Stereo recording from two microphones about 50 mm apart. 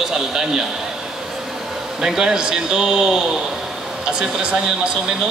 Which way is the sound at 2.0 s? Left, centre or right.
Centre.